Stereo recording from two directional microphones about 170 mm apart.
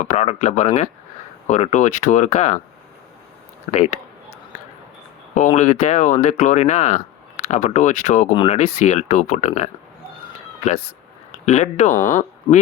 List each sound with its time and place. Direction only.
0.0 s speech: 45° left (ahead or behind)
3.7 s speech: 40° left (ahead or behind)
5.3 s speech: 45° left (ahead or behind)
11.4 s speech: 40° left (ahead or behind)